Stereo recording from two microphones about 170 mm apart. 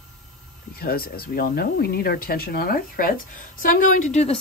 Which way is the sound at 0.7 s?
60° left (ahead or behind).